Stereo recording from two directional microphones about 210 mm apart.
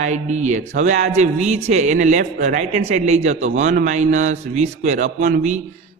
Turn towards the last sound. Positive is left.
turn(degrees=-35)  # may be behind; listen again after turning